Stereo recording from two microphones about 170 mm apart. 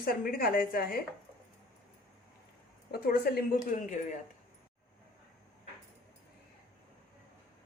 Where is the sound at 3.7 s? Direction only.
50° left (ahead or behind).